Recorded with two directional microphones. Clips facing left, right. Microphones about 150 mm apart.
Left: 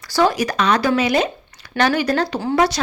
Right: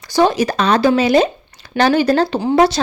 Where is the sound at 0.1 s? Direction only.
20° right (ahead or behind).